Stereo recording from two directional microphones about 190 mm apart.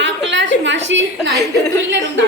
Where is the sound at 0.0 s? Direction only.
70° right (ahead or behind).